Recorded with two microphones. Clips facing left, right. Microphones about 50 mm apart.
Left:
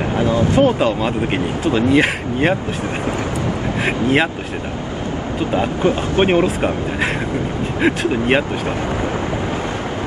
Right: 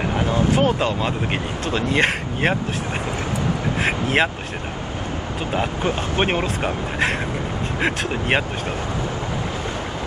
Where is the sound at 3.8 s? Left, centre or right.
Centre.